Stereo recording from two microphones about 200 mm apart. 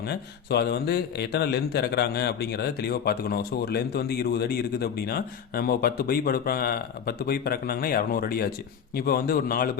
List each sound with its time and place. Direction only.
0.1 s speech: 55° left (ahead or behind)